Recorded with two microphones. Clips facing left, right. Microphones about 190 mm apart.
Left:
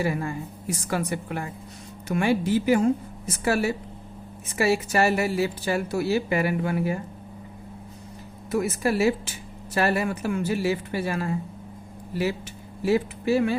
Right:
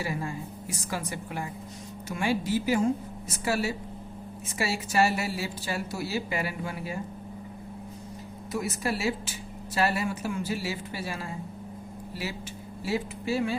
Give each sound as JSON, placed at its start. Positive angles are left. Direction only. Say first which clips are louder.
{"t": 0.0, "sound": "speech", "louder": "left 6 dB", "side_deg": 55}
{"t": 8.5, "sound": "speech", "louder": "left 7 dB", "side_deg": 55}
{"t": 12.8, "sound": "speech", "louder": "left 8 dB", "side_deg": 55}